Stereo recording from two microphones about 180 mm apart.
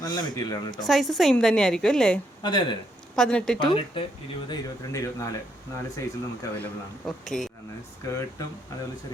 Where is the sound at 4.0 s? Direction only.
30° left (ahead or behind).